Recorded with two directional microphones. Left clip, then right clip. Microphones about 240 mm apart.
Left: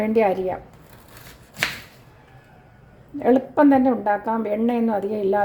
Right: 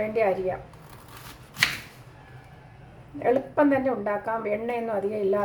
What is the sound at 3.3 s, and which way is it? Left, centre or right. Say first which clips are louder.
A woman's voice: left 6 dB; left.